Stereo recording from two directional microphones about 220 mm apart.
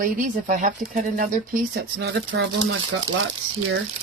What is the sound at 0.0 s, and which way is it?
Speech, 35° right (ahead or behind).